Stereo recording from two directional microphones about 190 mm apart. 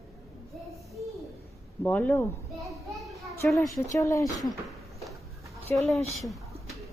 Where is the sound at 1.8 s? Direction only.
10° left (ahead or behind).